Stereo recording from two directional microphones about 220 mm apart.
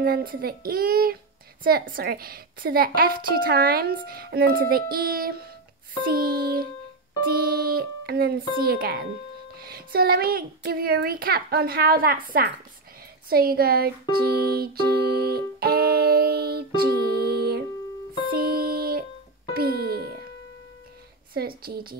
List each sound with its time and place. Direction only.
0.0 s a woman's voice: 40° right (ahead or behind)
14.1 s music: 45° right (ahead or behind)
21.3 s a woman's voice: 45° right (ahead or behind)